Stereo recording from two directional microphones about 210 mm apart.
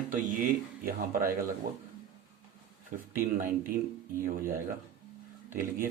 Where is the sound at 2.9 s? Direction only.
40° right (ahead or behind).